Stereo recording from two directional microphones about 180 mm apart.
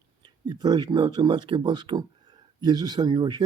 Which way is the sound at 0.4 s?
25° right (ahead or behind).